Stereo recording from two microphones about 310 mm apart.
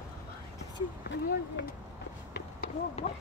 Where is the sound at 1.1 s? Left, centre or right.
Left.